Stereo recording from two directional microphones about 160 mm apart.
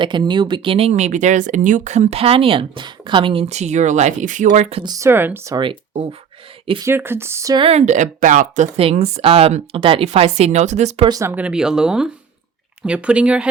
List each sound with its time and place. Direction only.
0.0 s speech: 30° right (ahead or behind)
3.4 s speech: 45° right (ahead or behind)
4.8 s speech: 20° right (ahead or behind)
5.5 s speech: 30° right (ahead or behind)
6.8 s speech: 15° right (ahead or behind)
7.6 s speech: 40° right (ahead or behind)
11.0 s speech: 20° right (ahead or behind)